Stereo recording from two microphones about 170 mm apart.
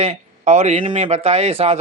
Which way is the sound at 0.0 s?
40° right (ahead or behind).